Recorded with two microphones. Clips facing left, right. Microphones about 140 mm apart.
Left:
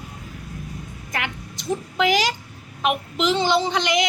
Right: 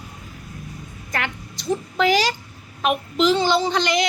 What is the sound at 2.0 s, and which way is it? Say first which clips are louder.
A woman's voice: right 1 dB; 15° left (ahead or behind).